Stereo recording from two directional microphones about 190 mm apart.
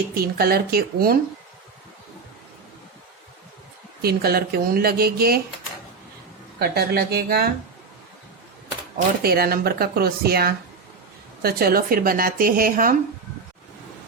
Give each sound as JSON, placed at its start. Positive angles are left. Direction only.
{"t": 0.1, "sound": "speech", "side_deg": -55}
{"t": 4.0, "sound": "speech", "side_deg": -55}
{"t": 6.6, "sound": "speech", "side_deg": -55}
{"t": 9.0, "sound": "speech", "side_deg": -55}